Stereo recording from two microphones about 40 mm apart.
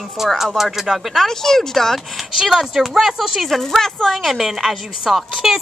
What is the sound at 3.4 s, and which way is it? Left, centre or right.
Speech, centre.